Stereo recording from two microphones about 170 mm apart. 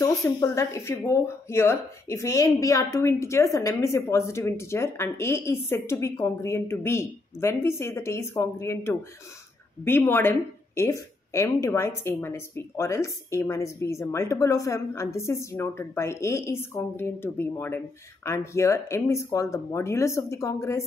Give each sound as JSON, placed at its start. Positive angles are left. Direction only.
{"t": 0.0, "sound": "a woman's voice", "side_deg": 20}